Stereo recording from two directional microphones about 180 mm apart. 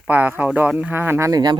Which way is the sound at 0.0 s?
10° right (ahead or behind).